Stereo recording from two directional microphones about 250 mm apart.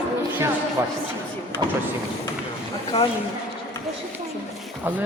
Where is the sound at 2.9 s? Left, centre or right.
Left.